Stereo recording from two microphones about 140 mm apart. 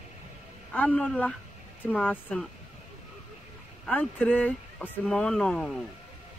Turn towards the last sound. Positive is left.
turn(degrees=5)  # may be behind; listen again after turning